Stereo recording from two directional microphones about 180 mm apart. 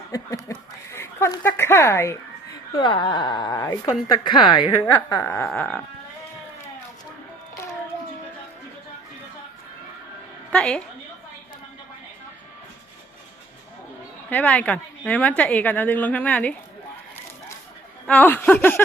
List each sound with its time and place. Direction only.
0.1 s a sound: 15° left (ahead or behind)
2.7 s speech: 25° left (ahead or behind)
5.2 s music: 5° left (ahead or behind)
10.5 s music: 5° left (ahead or behind)
14.3 s a woman's voice: 10° left (ahead or behind)
18.0 s a woman's voice: 10° left (ahead or behind)